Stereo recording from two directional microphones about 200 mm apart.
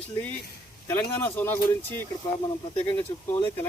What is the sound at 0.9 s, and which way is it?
Speech, 10° left (ahead or behind).